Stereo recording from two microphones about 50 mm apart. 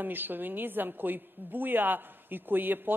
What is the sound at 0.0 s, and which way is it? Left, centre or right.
A man's voice, right.